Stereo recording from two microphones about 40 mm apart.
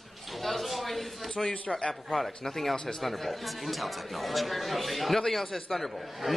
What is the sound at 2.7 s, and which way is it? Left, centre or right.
Speech, centre.